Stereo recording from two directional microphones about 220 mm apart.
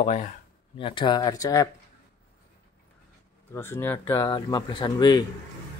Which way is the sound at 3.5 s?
10° left (ahead or behind).